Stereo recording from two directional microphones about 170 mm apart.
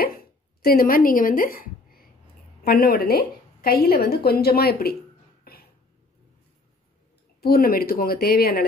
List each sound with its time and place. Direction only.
0.0 s a woman's voice: 60° left (ahead or behind)
5.4 s a sound: 60° left (ahead or behind)
7.4 s a woman's voice: 60° left (ahead or behind)